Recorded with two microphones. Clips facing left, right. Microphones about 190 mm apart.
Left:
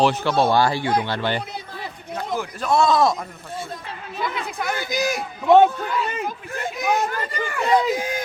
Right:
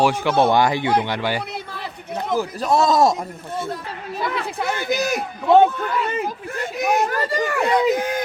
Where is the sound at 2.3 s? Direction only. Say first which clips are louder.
Right 2 dB; 35° right (ahead or behind).